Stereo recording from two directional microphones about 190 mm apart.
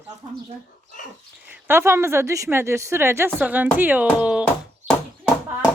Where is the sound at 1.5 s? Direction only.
10° right (ahead or behind).